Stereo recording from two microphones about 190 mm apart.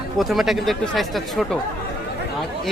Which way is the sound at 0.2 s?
Centre (ahead or behind).